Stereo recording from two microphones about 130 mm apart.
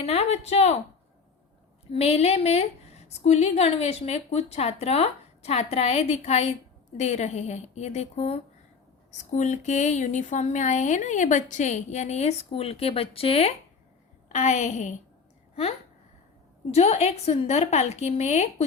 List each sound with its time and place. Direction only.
0.0 s speech: 50° left (ahead or behind)
1.9 s a woman's voice: 50° left (ahead or behind)
9.1 s a woman's voice: 65° left (ahead or behind); by 13.5 s 50° left (ahead or behind)
14.3 s a woman's voice: 60° left (ahead or behind)
16.7 s a woman's voice: 55° left (ahead or behind)